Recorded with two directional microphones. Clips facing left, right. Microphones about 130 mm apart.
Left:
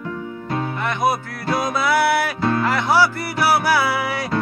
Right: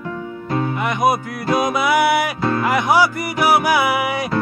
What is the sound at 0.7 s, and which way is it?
Music, 15° right (ahead or behind).